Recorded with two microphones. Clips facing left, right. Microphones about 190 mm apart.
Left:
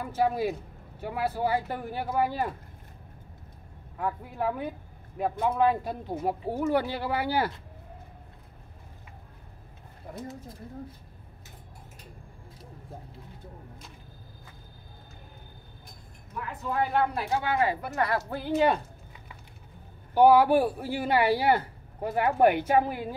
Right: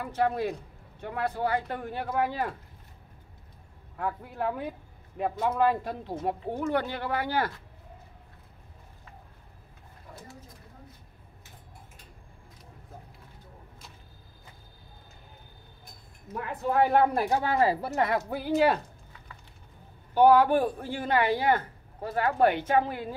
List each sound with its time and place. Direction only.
0.0 s speech: 5° left (ahead or behind)
4.0 s a woman's voice: centre (ahead or behind)
16.7 s speech: 50° right (ahead or behind); by 17.9 s 35° right (ahead or behind)
17.9 s a woman's voice: 20° right (ahead or behind)
18.5 s speech: 5° right (ahead or behind)
20.2 s a woman's voice: 10° left (ahead or behind)